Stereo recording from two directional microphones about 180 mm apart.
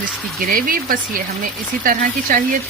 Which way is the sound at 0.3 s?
50° right (ahead or behind).